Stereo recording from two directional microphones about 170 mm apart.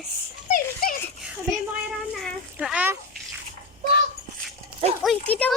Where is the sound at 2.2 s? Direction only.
5° right (ahead or behind).